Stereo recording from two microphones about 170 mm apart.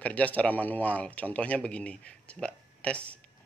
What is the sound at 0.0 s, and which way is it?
Speech, 10° left (ahead or behind).